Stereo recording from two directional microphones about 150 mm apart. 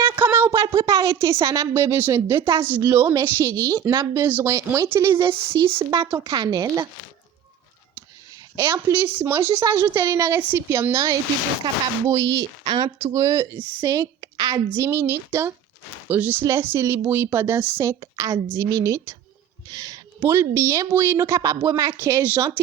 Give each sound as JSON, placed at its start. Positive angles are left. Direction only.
{"t": 0.0, "sound": "a sound", "side_deg": -15}
{"t": 0.6, "sound": "speech", "side_deg": -30}
{"t": 0.9, "sound": "a woman's voice", "side_deg": -20}
{"t": 5.5, "sound": "a woman's voice", "side_deg": -35}
{"t": 8.5, "sound": "a woman's voice", "side_deg": -10}